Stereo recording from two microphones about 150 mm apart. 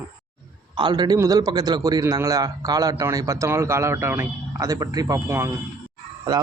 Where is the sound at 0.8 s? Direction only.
30° right (ahead or behind).